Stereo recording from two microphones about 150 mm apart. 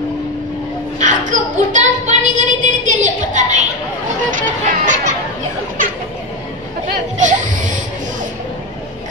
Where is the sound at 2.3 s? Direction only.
55° right (ahead or behind).